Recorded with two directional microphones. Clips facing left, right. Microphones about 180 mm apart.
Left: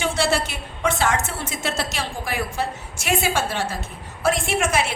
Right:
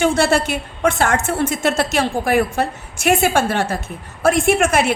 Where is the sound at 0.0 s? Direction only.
50° right (ahead or behind).